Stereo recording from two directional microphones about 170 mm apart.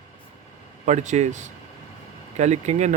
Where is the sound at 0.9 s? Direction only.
45° right (ahead or behind).